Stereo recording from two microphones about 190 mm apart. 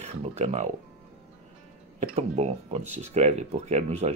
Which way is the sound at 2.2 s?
35° right (ahead or behind).